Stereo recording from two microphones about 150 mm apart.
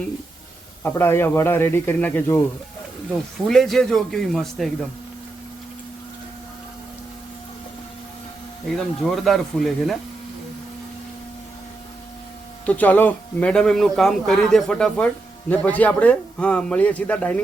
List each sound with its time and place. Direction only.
0.8 s a man's voice: 15° left (ahead or behind)
3.4 s speech: centre (ahead or behind)
8.7 s speech: centre (ahead or behind)
12.6 s a man's voice: 10° left (ahead or behind)